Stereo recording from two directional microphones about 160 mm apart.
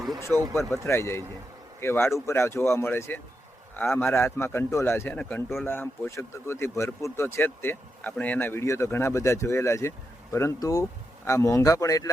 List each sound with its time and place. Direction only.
0.3 s speech: 10° left (ahead or behind)